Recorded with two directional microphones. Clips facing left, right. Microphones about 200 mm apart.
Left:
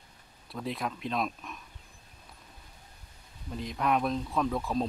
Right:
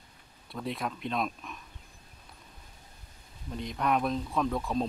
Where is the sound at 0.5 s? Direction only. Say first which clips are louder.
Even; centre (ahead or behind).